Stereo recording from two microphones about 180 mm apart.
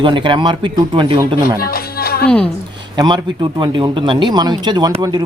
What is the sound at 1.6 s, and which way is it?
Music, 55° left (ahead or behind).